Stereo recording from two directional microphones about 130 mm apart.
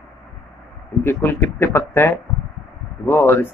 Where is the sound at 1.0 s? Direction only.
15° left (ahead or behind).